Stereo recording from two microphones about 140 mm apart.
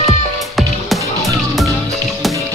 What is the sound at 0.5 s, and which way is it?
Music, centre (ahead or behind).